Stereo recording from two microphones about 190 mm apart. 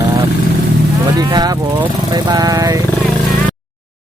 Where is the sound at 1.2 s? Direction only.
20° right (ahead or behind).